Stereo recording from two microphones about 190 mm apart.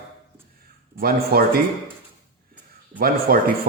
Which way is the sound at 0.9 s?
50° right (ahead or behind).